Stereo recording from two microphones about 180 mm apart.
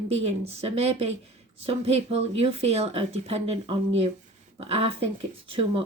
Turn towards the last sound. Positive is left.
turn(degrees=-30)  # may be behind; listen again after turning